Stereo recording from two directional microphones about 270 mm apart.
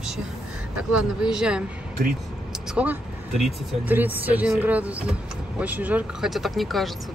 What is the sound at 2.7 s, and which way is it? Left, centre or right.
Speech, centre.